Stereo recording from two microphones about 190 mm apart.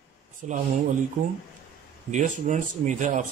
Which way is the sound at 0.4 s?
40° right (ahead or behind).